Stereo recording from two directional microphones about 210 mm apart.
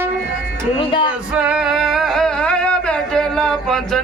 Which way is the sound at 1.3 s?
5° right (ahead or behind).